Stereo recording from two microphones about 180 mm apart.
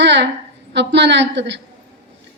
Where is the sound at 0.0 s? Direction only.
80° right.